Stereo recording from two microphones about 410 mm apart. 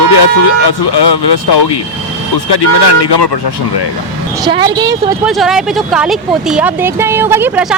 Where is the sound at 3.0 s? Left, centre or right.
Left.